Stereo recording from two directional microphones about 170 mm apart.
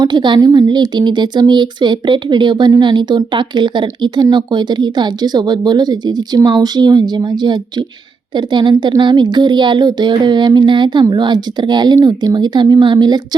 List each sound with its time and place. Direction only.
0.0 s speech: 25° right (ahead or behind)